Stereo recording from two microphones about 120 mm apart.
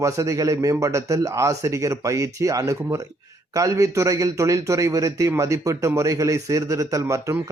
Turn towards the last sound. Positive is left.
turn(degrees=-25)  # may be behind; listen again after turning